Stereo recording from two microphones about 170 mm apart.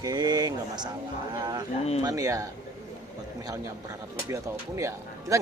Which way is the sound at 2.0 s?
20° right (ahead or behind).